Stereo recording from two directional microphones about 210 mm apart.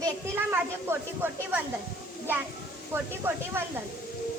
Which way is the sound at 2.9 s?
10° right (ahead or behind).